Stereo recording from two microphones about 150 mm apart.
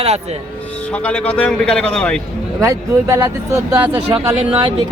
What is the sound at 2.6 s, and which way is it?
Speech, 20° right (ahead or behind).